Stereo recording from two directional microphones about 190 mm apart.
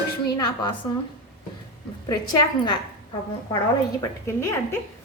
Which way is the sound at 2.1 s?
20° left (ahead or behind).